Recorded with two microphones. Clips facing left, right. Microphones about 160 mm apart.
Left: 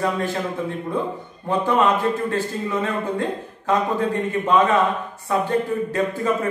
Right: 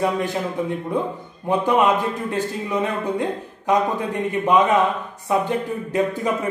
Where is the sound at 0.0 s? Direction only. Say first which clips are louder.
Right 1 dB; 15° right (ahead or behind).